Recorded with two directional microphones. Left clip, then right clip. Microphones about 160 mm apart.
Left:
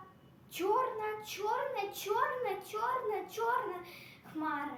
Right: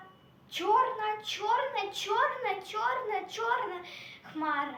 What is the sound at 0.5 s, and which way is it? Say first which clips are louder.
A woman's voice: right 5 dB; 15° left (ahead or behind).